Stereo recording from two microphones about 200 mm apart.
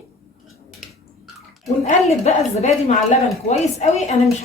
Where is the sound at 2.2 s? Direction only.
35° left (ahead or behind).